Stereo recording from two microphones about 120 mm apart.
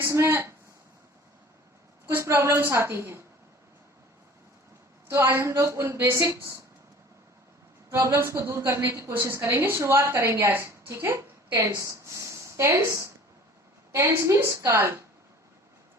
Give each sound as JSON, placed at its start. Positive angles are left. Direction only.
{"t": 0.0, "sound": "a sound", "side_deg": -20}
{"t": 2.0, "sound": "a woman's voice", "side_deg": -20}
{"t": 5.0, "sound": "a woman's voice", "side_deg": -20}
{"t": 7.9, "sound": "a woman's voice", "side_deg": -20}